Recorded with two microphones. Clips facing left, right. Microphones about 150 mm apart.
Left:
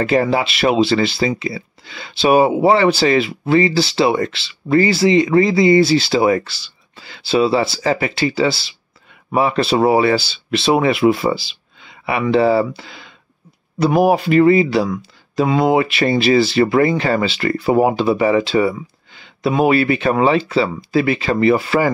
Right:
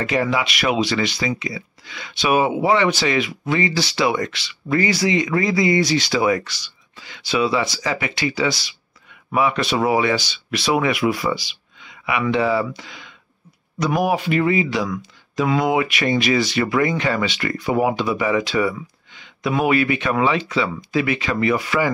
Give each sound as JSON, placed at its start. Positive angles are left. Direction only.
{"t": 0.0, "sound": "speech", "side_deg": 35}